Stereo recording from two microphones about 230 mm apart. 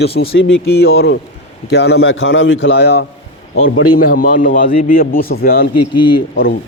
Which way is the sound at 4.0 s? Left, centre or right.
Left.